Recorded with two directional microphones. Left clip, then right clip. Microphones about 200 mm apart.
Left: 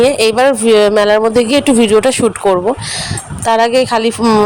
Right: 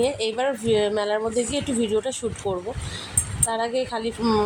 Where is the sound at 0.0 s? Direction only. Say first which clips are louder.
Left 14 dB; 45° left (ahead or behind).